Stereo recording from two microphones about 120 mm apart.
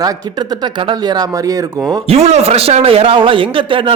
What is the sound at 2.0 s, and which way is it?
A man's voice, 60° right (ahead or behind).